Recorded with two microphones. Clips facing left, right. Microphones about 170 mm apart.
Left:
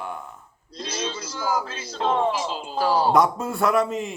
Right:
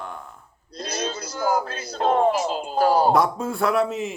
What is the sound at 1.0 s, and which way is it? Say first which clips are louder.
Speech: right 4 dB; 50° right (ahead or behind).